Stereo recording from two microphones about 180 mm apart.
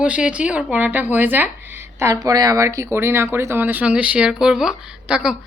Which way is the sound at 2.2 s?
20° right (ahead or behind).